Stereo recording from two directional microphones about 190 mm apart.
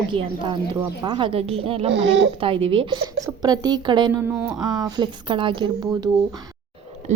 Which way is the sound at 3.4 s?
20° right (ahead or behind).